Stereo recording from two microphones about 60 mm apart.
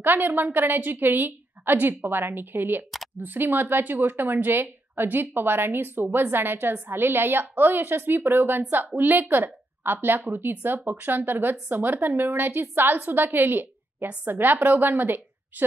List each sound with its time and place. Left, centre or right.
0.0 s a woman's voice: right